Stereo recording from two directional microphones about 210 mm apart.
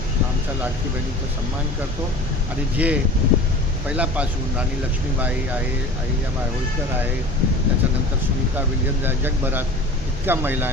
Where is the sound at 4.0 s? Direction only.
5° right (ahead or behind).